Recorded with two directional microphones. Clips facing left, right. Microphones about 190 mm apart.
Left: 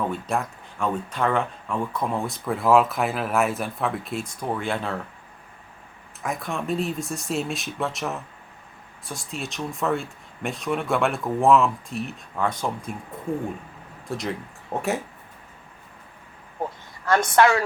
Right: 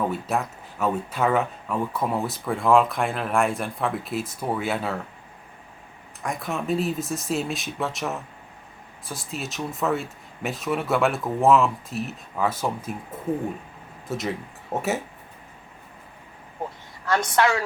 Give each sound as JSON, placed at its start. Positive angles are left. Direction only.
{"t": 0.0, "sound": "speech", "side_deg": -5}
{"t": 6.2, "sound": "speech", "side_deg": 0}
{"t": 14.1, "sound": "speech", "side_deg": 0}
{"t": 17.1, "sound": "a woman's voice", "side_deg": 50}